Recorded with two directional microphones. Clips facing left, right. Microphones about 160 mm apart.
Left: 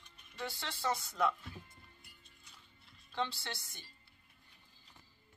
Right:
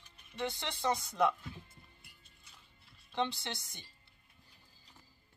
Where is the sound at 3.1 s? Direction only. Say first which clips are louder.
Right 3 dB; 20° right (ahead or behind).